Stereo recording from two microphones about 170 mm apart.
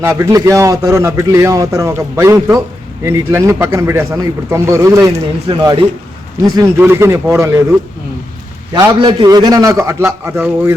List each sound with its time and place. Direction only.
0.0 s a man's voice: 15° right (ahead or behind)
8.7 s a man's voice: 25° right (ahead or behind)